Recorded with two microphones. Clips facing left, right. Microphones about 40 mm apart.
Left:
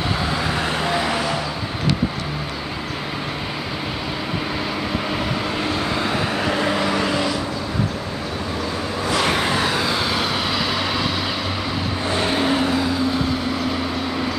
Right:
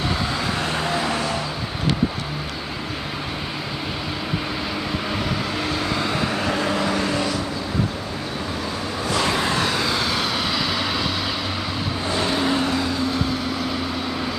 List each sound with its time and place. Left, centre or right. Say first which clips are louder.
0.6 s vehicle: left 2 dB; centre
5.1 s vehicle: left 2 dB; centre
7.1 s vehicle: left 2 dB; left
9.1 s vehicle: left 2 dB; left
9.5 s vehicle: left 1 dB; centre
12.1 s vehicle: left 2 dB; left
12.4 s vehicle: left 2 dB; centre